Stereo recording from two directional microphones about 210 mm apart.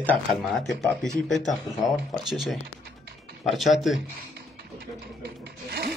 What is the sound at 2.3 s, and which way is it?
Speech, centre (ahead or behind).